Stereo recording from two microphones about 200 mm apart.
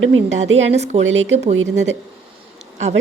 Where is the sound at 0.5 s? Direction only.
35° right (ahead or behind).